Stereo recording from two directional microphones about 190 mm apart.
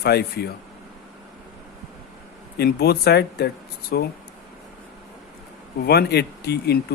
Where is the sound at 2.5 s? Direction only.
60° left (ahead or behind).